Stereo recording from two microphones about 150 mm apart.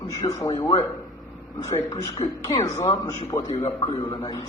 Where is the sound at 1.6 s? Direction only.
25° left (ahead or behind).